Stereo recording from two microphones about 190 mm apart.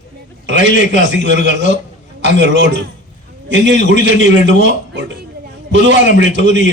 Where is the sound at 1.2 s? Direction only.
70° right (ahead or behind).